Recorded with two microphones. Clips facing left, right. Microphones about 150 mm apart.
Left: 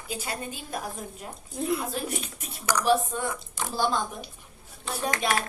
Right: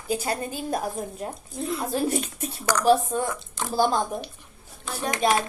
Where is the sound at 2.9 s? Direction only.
40° right (ahead or behind).